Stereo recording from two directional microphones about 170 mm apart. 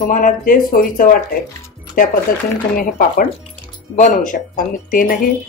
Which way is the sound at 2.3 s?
55° left (ahead or behind).